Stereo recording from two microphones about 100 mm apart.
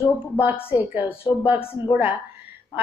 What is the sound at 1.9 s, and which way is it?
Speech, 20° right (ahead or behind).